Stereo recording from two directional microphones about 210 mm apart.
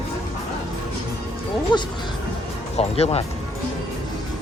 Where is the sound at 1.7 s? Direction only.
20° left (ahead or behind).